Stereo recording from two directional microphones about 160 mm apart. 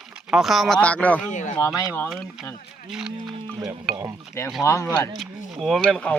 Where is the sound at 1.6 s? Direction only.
20° left (ahead or behind).